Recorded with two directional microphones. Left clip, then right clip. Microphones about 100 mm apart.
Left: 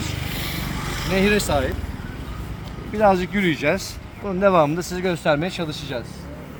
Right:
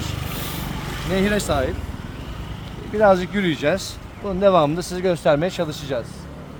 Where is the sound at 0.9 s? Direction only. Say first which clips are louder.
Left 3 dB; 90° left.